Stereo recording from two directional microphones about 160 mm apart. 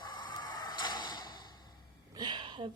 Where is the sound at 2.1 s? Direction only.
25° right (ahead or behind).